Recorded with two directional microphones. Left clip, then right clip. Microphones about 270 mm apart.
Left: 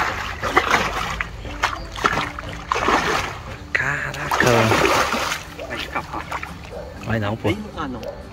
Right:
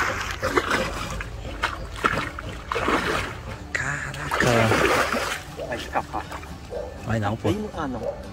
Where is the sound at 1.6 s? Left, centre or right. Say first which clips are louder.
Left 4 dB; centre.